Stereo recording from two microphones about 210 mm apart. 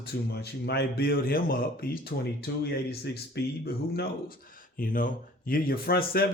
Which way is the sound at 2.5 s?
60° left (ahead or behind).